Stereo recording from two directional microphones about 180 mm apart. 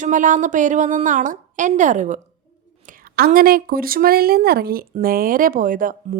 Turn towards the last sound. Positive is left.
turn(degrees=-50)  # may be behind; listen again after turning